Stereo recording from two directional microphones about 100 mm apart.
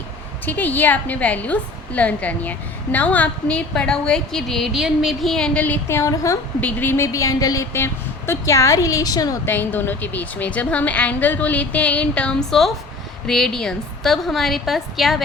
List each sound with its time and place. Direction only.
0.4 s a woman's voice: 15° left (ahead or behind)
5.6 s a woman's voice: 15° left (ahead or behind)
6.0 s a woman's voice: 35° left (ahead or behind)
6.6 s a woman's voice: 15° left (ahead or behind); by 9.4 s 40° left (ahead or behind)
9.5 s a woman's voice: 20° left (ahead or behind); by 15.2 s centre (ahead or behind)